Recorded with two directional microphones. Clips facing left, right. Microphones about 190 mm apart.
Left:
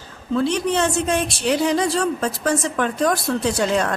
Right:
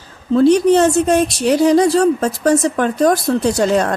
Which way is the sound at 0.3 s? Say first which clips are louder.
Right 9 dB; 40° right (ahead or behind).